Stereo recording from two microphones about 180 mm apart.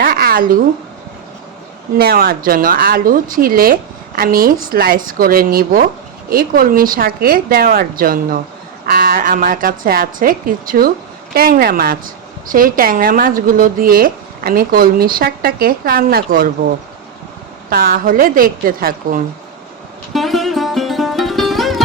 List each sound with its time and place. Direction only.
0.0 s a sound: 55° right (ahead or behind)
2.0 s speech: 60° right (ahead or behind)
17.7 s speech: 55° right (ahead or behind)
20.1 s music: centre (ahead or behind)